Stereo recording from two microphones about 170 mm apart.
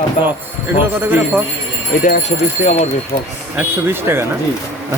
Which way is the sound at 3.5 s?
10° right (ahead or behind).